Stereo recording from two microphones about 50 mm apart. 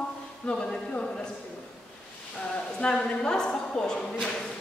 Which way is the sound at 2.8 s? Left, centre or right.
Centre.